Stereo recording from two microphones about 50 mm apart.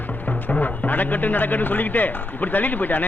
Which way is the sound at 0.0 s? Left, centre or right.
Left.